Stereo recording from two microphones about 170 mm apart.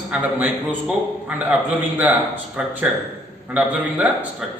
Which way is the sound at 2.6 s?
5° right (ahead or behind).